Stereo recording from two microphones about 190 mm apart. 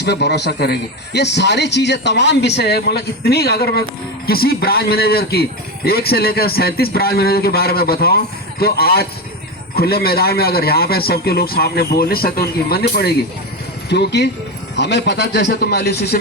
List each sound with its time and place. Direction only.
0.0 s a man's voice: 60° left (ahead or behind)